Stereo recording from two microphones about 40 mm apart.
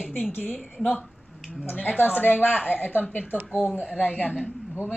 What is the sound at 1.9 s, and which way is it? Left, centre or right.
A woman's voice, left.